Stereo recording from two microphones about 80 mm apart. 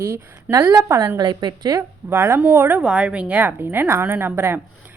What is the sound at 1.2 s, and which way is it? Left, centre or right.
Speech, right.